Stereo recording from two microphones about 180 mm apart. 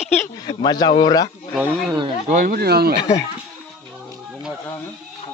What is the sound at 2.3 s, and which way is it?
Speech, 55° right (ahead or behind).